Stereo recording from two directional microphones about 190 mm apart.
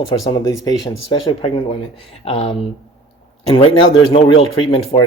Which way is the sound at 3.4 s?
30° left (ahead or behind).